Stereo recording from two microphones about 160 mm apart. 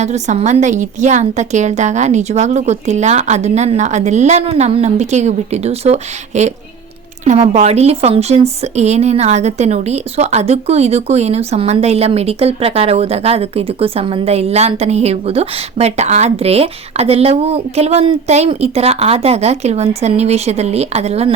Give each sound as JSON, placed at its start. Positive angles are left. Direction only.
{"t": 0.0, "sound": "a woman's voice", "side_deg": -45}
{"t": 7.5, "sound": "speech", "side_deg": -45}